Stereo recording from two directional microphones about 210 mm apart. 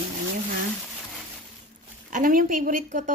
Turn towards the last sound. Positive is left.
turn(degrees=-40)  # may be behind; listen again after turning